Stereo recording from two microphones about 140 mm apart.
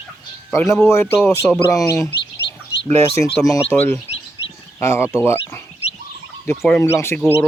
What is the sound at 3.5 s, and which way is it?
Speech, 15° left (ahead or behind).